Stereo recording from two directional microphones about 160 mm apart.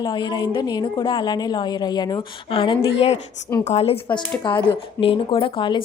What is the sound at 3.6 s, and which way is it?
A woman's voice, 40° left (ahead or behind).